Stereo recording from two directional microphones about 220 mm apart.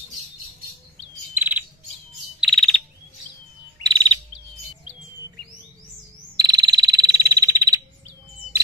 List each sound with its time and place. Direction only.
1.3 s bird: 10° right (ahead or behind)
2.4 s frog: centre (ahead or behind)
3.8 s chirp: 20° right (ahead or behind)
6.3 s frog: 20° right (ahead or behind)